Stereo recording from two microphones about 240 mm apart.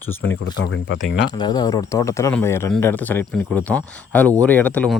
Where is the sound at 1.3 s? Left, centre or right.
Centre.